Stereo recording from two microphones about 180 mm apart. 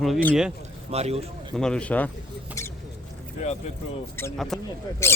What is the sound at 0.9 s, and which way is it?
Speech, 35° right (ahead or behind).